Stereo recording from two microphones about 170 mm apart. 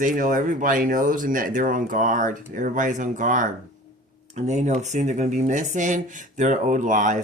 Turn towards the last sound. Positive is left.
turn(degrees=-50)  # may be behind; listen again after turning